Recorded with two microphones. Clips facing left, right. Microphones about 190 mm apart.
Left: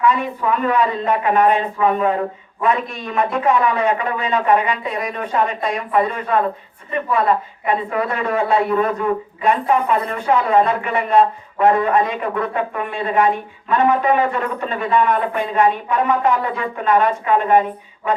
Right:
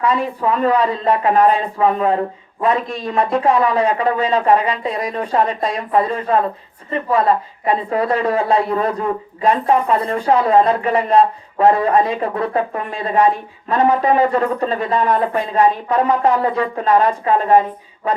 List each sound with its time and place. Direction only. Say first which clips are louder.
0.0 s speech: even; 35° right (ahead or behind)